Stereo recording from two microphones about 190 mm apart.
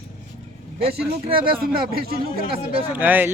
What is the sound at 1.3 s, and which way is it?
Speech, 50° right (ahead or behind).